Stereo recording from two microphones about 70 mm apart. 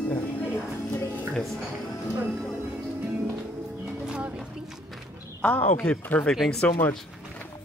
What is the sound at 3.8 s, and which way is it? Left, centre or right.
Music, centre.